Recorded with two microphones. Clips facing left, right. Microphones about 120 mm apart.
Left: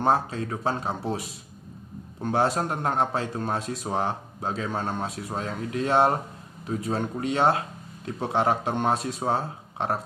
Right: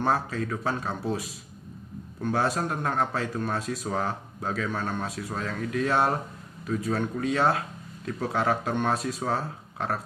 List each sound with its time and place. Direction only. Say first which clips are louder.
0.0 s a man's voice: left 3 dB; 25° left (ahead or behind)